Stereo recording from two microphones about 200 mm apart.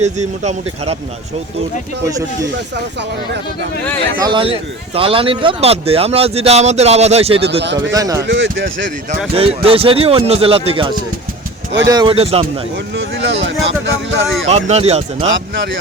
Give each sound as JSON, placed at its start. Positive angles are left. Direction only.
{"t": 0.0, "sound": "speech", "side_deg": -35}
{"t": 2.0, "sound": "speech", "side_deg": -15}
{"t": 4.2, "sound": "speech", "side_deg": -25}
{"t": 7.9, "sound": "speech", "side_deg": -20}
{"t": 8.2, "sound": "speech", "side_deg": -65}
{"t": 9.3, "sound": "speech", "side_deg": -30}
{"t": 13.0, "sound": "a sound", "side_deg": -65}
{"t": 14.4, "sound": "speech", "side_deg": -30}